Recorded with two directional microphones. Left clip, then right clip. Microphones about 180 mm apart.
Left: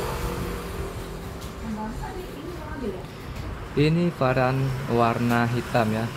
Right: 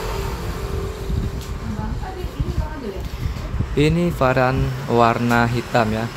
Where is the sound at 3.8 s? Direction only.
15° right (ahead or behind).